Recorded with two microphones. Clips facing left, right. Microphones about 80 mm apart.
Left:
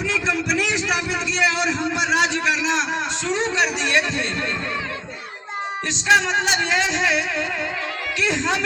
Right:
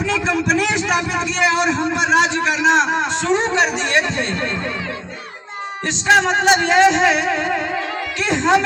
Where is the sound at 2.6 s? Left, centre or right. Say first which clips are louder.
Right 7 dB; right.